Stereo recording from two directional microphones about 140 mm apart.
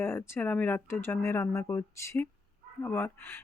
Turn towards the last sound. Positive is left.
turn(degrees=15)  # may be behind; listen again after turning